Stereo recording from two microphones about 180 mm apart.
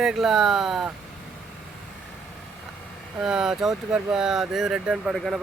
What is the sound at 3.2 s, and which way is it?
Speech, 5° right (ahead or behind).